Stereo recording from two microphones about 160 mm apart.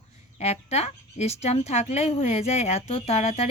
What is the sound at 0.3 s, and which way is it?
Speech, 45° left (ahead or behind).